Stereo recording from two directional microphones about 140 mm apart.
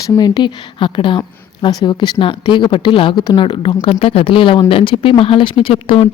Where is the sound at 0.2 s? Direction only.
30° left (ahead or behind).